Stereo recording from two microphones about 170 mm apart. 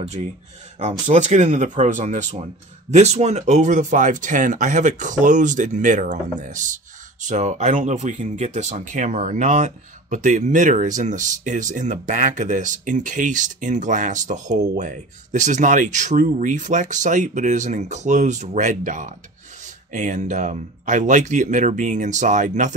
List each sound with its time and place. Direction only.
0.7 s speech: 45° right (ahead or behind)